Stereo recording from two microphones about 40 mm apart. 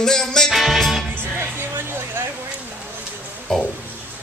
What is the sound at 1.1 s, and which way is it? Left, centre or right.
Music, right.